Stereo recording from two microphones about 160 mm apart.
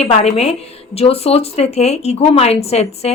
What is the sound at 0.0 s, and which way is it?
A woman's voice, 40° left (ahead or behind).